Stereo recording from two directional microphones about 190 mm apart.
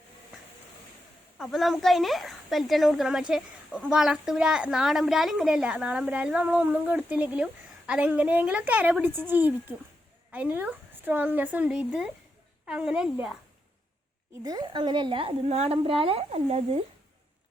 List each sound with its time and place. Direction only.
1.4 s a woman's voice: centre (ahead or behind)
14.4 s a woman's voice: 20° right (ahead or behind)